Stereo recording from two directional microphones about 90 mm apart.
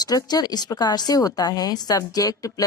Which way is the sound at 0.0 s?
45° left (ahead or behind).